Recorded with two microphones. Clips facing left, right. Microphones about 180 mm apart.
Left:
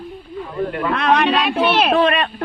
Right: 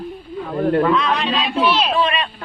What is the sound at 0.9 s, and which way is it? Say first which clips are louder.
Speech: left 3 dB; 60° left (ahead or behind).